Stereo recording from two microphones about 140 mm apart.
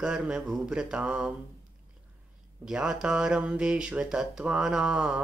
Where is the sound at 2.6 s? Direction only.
5° right (ahead or behind).